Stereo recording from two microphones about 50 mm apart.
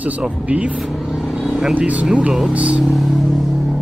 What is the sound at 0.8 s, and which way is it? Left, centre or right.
Speech, centre.